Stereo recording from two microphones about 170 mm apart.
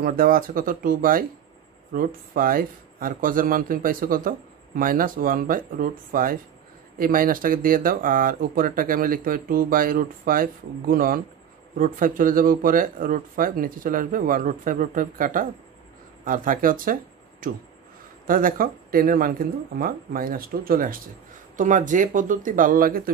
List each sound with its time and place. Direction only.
0.0 s speech: 60° right (ahead or behind)